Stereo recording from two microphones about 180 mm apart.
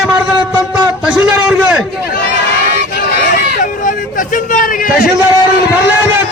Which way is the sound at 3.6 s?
45° left (ahead or behind).